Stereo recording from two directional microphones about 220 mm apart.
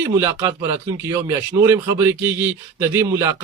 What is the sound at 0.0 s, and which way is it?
Speech, 15° right (ahead or behind).